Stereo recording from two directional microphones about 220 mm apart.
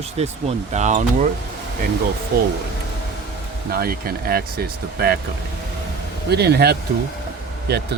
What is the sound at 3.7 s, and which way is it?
Speech, 45° right (ahead or behind).